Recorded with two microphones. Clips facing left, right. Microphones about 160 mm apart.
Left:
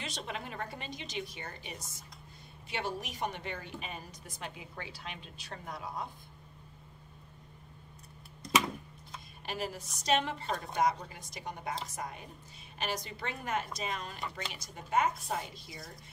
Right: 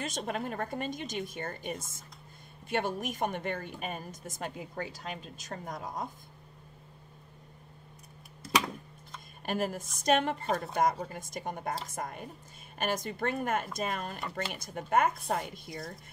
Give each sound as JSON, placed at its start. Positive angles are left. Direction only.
{"t": 0.0, "sound": "a woman's voice", "side_deg": -45}
{"t": 9.5, "sound": "a woman's voice", "side_deg": -50}